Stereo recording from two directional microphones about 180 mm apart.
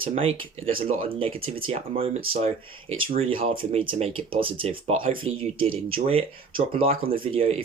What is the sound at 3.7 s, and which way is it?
Speech, 35° right (ahead or behind).